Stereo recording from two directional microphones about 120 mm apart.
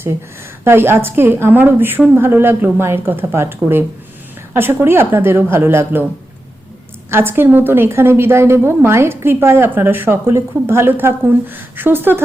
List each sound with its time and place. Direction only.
0.6 s a woman's voice: 20° right (ahead or behind)
7.1 s a woman's voice: 20° right (ahead or behind)